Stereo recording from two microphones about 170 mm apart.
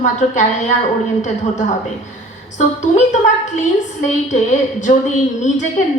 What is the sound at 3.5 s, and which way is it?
A woman's voice, 45° left (ahead or behind).